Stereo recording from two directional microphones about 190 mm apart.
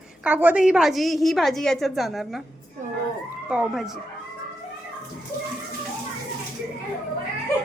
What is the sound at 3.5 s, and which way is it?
Speech, 5° right (ahead or behind).